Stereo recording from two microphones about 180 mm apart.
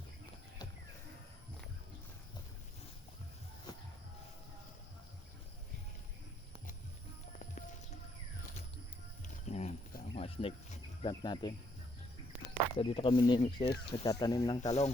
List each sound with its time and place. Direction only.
3.7 s music: 20° left (ahead or behind)
9.2 s a sound: 40° left (ahead or behind)
10.2 s speech: 30° left (ahead or behind)
12.7 s speech: 30° left (ahead or behind)
14.7 s speech: 35° left (ahead or behind)